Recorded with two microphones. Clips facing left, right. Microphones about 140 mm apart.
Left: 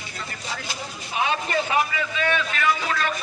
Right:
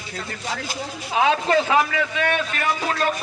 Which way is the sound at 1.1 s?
90° right.